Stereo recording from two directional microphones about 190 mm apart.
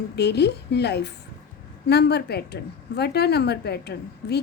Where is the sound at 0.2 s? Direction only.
60° left (ahead or behind).